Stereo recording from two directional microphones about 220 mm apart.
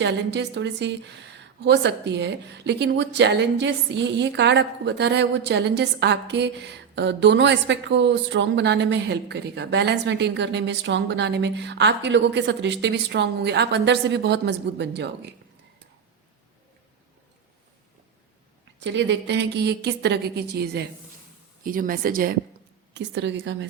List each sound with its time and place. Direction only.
0.0 s a woman's voice: 50° right (ahead or behind)
18.8 s a woman's voice: 55° right (ahead or behind)
23.0 s a woman's voice: 55° right (ahead or behind)